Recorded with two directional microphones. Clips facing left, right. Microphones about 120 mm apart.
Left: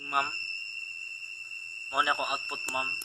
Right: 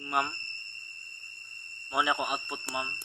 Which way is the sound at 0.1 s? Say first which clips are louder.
Right 1 dB; centre (ahead or behind).